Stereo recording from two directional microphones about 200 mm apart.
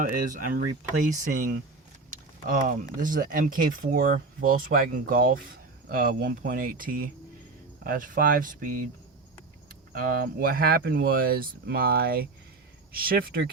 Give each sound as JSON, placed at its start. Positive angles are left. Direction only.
{"t": 0.0, "sound": "speech", "side_deg": -40}
{"t": 9.9, "sound": "speech", "side_deg": -45}